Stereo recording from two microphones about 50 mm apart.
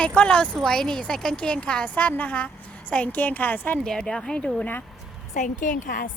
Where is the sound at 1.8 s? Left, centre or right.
Left.